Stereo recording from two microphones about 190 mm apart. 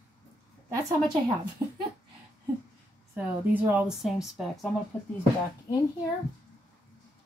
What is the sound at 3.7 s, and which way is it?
Speech, 5° right (ahead or behind).